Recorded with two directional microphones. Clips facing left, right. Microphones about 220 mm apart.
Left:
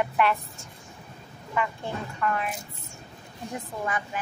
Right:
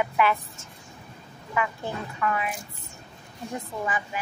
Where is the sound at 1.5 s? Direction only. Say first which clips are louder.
Right 1 dB; 5° right (ahead or behind).